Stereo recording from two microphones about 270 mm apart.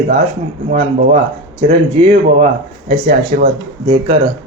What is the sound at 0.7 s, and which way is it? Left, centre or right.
Speech, right.